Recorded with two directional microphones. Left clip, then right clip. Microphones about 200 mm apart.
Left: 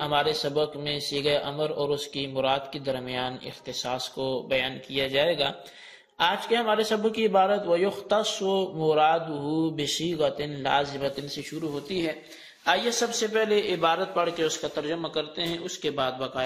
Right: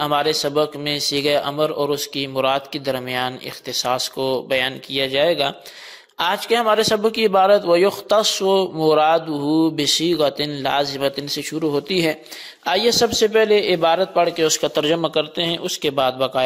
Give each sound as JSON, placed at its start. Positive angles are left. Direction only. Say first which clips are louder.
{"t": 0.0, "sound": "a man's voice", "louder": "right 6 dB", "side_deg": -55}